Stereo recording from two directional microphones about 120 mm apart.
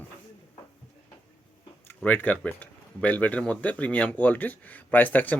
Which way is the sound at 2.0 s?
15° left (ahead or behind).